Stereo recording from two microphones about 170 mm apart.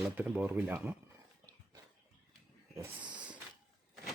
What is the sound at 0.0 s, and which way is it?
Speech, 10° right (ahead or behind).